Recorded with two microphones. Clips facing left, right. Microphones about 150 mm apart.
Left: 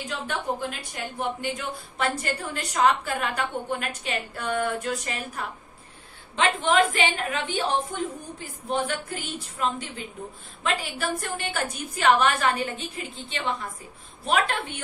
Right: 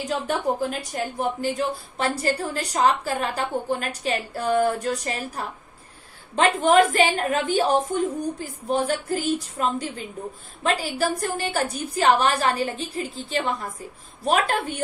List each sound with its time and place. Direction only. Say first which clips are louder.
0.3 s a woman's voice: right 4 dB; 40° right (ahead or behind)